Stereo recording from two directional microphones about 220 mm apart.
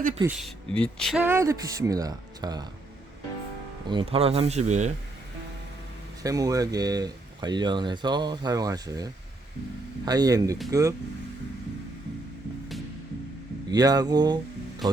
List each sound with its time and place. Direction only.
0.2 s speech: 5° right (ahead or behind)
3.8 s speech: 25° right (ahead or behind)
6.2 s speech: 15° right (ahead or behind)
10.1 s speech: 15° right (ahead or behind)
13.7 s speech: 15° right (ahead or behind)